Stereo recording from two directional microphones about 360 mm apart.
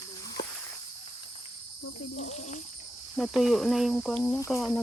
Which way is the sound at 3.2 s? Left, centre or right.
Centre.